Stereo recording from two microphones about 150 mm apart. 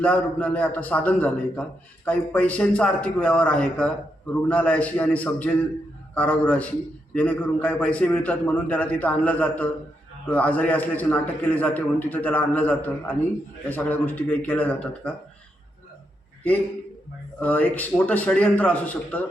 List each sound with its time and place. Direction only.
0.0 s a man's voice: 10° left (ahead or behind)
17.4 s a man's voice: 10° left (ahead or behind)